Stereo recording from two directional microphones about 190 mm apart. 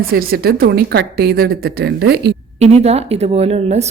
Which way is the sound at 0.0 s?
50° right (ahead or behind).